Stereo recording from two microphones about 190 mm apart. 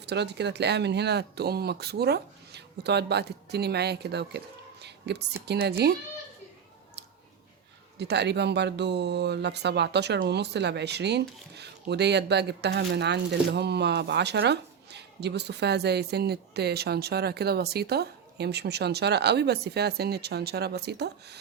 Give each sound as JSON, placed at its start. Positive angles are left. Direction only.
{"t": 0.0, "sound": "speech", "side_deg": -60}
{"t": 7.9, "sound": "speech", "side_deg": -60}